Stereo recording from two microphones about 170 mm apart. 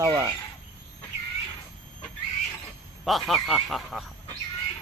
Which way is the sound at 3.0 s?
Centre (ahead or behind).